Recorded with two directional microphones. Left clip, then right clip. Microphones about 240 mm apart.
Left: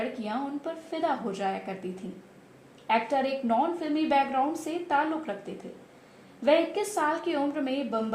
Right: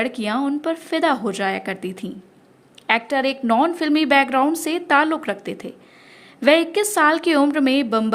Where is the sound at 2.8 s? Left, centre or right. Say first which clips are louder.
Right 7 dB; right.